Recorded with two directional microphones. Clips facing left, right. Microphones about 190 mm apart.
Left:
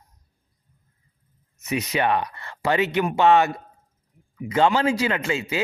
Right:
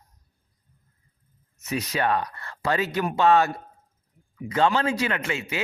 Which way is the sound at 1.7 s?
20° left (ahead or behind).